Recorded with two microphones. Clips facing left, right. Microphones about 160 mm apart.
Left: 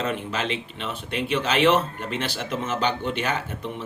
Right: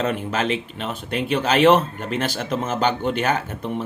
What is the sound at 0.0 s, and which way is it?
Speech, 45° right (ahead or behind).